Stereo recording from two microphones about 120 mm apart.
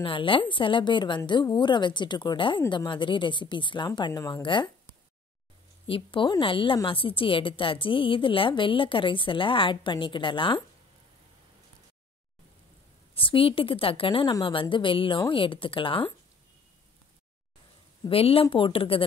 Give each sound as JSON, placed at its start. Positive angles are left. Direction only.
{"t": 0.0, "sound": "a woman's voice", "side_deg": 45}
{"t": 5.9, "sound": "a woman's voice", "side_deg": 45}
{"t": 13.1, "sound": "a woman's voice", "side_deg": 50}
{"t": 18.0, "sound": "a woman's voice", "side_deg": 50}